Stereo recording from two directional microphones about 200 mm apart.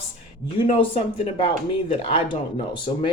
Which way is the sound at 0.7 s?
30° left (ahead or behind).